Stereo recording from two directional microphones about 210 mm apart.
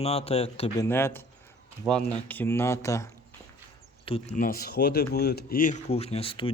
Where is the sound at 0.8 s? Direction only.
10° left (ahead or behind).